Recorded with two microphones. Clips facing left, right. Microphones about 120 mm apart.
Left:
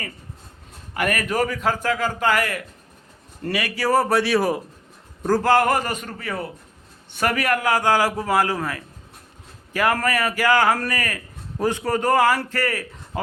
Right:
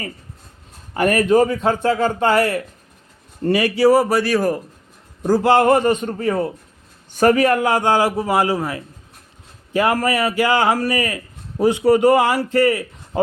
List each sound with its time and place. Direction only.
0.9 s a man's voice: 30° right (ahead or behind)
3.8 s speech: 10° right (ahead or behind)
5.2 s a man's voice: 15° right (ahead or behind)